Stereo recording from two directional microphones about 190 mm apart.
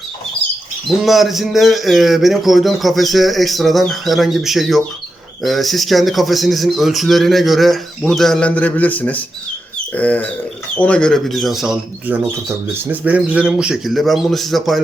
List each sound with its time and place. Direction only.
0.9 s speech: centre (ahead or behind)